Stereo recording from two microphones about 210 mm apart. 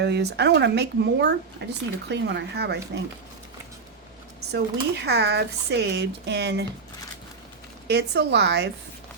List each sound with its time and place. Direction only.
0.0 s speech: 55° right (ahead or behind)
4.5 s speech: 50° right (ahead or behind)
7.9 s speech: 55° right (ahead or behind)